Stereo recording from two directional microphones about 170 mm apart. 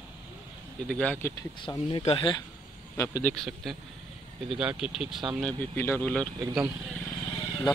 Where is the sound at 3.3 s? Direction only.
Centre (ahead or behind).